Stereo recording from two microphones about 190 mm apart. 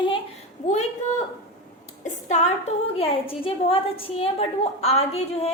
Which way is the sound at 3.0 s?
30° left (ahead or behind).